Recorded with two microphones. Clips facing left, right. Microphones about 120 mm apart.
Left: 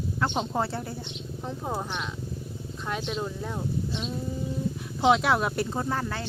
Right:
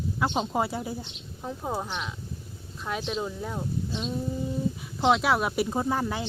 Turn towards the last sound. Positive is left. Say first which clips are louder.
# right 2 dB
turn(degrees=-15)  # may be behind; listen again after turning